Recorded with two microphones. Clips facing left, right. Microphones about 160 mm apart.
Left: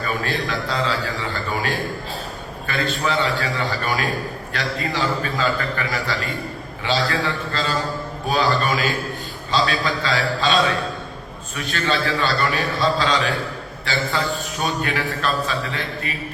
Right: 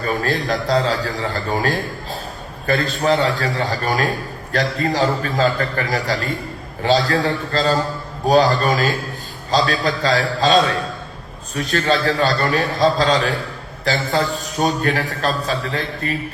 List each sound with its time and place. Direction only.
0.0 s a man's voice: 40° right (ahead or behind)